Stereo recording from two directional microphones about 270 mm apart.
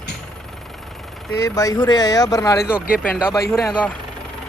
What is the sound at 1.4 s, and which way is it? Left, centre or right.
Speech, centre.